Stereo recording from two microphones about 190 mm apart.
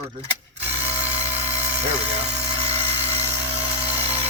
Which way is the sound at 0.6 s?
35° right (ahead or behind).